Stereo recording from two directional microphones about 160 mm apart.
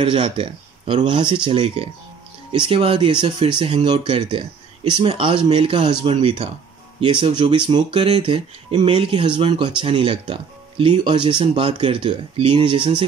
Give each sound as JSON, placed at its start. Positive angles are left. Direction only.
{"t": 0.0, "sound": "speech", "side_deg": -30}